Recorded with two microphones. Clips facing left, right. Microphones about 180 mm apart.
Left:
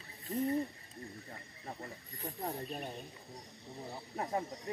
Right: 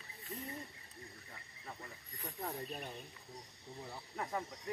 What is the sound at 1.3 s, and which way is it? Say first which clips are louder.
Snake: left 5 dB; 40° left (ahead or behind).